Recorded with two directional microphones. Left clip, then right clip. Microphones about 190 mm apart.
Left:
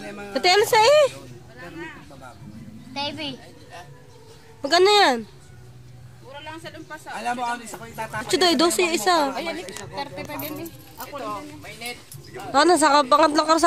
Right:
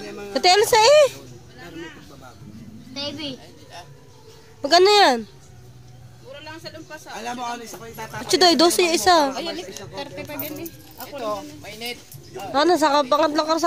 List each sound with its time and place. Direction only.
0.0 s a sound: 15° left (ahead or behind)
0.3 s speech: 5° right (ahead or behind)
2.9 s a woman's voice: 35° left (ahead or behind)
4.6 s speech: 5° right (ahead or behind)
7.2 s speech: 25° left (ahead or behind)
8.3 s a woman's voice: 5° right (ahead or behind)
12.5 s speech: 5° left (ahead or behind)